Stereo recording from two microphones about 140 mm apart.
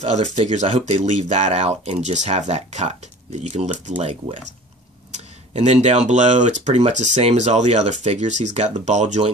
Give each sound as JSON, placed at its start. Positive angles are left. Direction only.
{"t": 0.0, "sound": "speech", "side_deg": -55}
{"t": 4.0, "sound": "speech", "side_deg": -40}
{"t": 5.1, "sound": "speech", "side_deg": -55}